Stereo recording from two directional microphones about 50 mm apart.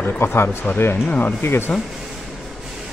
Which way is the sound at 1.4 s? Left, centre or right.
Left.